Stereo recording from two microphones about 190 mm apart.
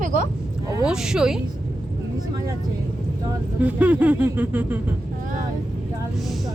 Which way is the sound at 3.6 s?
10° right (ahead or behind).